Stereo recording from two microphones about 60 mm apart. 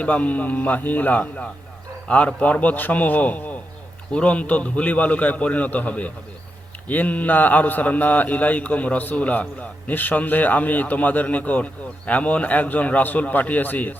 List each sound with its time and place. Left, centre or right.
0.0 s a man's voice: left